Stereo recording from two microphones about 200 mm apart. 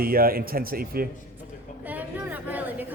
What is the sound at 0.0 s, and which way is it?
Speech, 45° right (ahead or behind).